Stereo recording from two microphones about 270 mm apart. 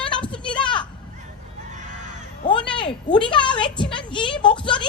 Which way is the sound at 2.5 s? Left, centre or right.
Centre.